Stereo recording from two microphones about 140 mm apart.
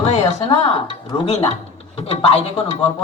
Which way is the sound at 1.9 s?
45° left (ahead or behind).